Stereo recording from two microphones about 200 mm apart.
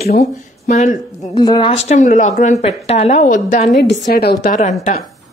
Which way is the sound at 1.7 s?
35° left (ahead or behind).